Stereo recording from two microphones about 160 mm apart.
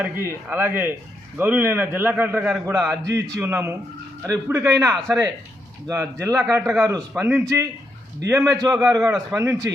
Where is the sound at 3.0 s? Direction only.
20° right (ahead or behind).